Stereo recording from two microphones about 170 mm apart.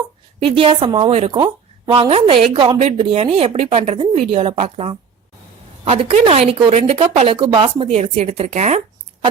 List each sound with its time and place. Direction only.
0.4 s a woman's voice: 30° right (ahead or behind)